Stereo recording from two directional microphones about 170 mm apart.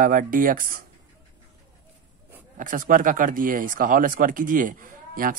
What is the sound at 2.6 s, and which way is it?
A man's voice, 50° right (ahead or behind).